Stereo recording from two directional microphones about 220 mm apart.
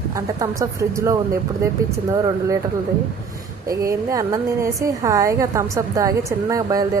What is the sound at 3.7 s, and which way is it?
A woman's voice, 15° right (ahead or behind).